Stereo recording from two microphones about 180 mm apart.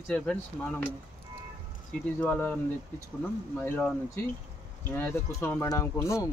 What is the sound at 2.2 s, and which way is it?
Speech, 5° left (ahead or behind).